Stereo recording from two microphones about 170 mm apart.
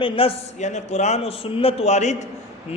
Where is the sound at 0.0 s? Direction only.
35° left (ahead or behind).